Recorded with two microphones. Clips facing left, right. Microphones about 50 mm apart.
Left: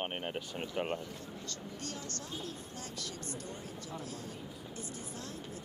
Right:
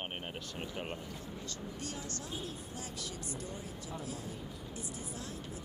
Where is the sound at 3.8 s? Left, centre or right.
Centre.